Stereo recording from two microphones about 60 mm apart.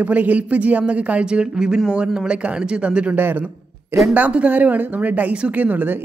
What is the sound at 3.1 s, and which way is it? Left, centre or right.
A man's voice, right.